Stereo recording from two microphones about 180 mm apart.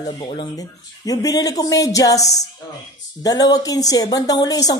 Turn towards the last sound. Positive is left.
turn(degrees=20)  # may be behind; listen again after turning